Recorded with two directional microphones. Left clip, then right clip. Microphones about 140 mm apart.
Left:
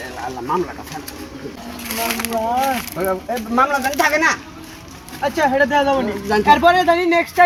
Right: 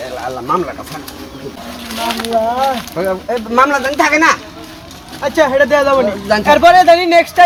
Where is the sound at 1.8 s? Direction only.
90° left.